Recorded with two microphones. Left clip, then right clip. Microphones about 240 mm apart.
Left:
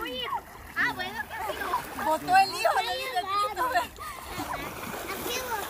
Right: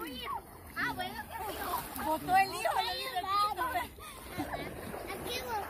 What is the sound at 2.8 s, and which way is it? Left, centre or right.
Vehicle, right.